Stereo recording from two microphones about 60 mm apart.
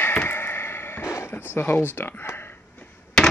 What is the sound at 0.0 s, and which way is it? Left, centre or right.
Chop, left.